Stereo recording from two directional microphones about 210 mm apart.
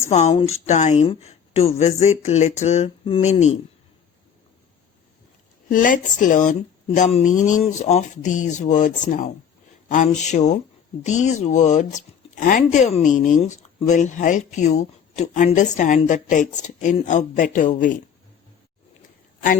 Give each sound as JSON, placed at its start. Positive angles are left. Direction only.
{"t": 0.1, "sound": "speech", "side_deg": 30}
{"t": 5.6, "sound": "speech", "side_deg": 40}